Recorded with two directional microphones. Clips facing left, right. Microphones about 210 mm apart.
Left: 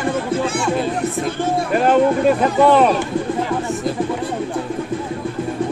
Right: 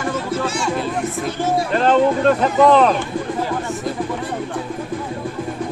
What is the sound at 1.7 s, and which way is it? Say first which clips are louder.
Speech: left 1 dB; 10° left (ahead or behind).